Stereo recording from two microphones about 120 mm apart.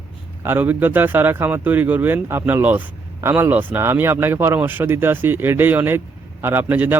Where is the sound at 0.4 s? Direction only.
15° right (ahead or behind).